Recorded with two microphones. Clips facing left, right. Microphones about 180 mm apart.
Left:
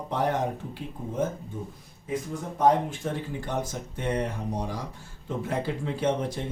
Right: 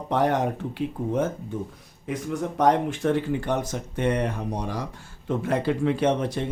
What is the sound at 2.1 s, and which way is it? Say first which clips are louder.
A man's voice: right 3 dB; 75° right (ahead or behind).